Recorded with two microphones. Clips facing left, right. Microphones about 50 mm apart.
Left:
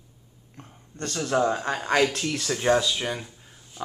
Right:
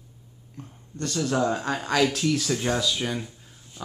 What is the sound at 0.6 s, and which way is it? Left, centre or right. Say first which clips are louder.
Speech: right 2 dB; left.